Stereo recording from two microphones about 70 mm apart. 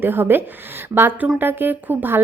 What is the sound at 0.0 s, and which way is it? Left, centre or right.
A woman's voice, right.